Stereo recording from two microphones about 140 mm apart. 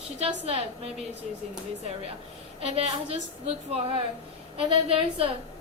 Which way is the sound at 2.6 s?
45° right (ahead or behind).